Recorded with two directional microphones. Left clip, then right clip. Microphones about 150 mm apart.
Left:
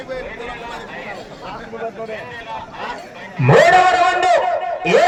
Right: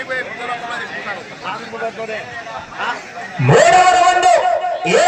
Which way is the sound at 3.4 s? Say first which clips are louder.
Right 1 dB; 25° right (ahead or behind).